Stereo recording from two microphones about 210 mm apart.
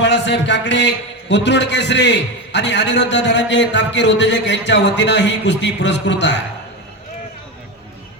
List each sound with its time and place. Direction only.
0.0 s a man's voice: 55° left (ahead or behind)